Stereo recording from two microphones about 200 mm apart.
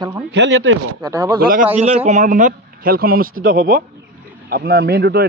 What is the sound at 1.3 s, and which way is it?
Speech, 45° right (ahead or behind).